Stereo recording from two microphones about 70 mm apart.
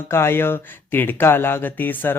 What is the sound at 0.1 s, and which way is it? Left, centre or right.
Speech, left.